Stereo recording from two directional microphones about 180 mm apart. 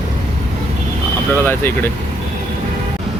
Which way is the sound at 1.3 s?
10° left (ahead or behind).